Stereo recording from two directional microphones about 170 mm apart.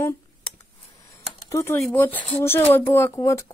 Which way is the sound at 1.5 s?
15° left (ahead or behind).